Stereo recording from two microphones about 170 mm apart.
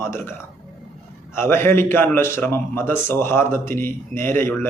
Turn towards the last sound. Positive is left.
turn(degrees=15)  # may be behind; listen again after turning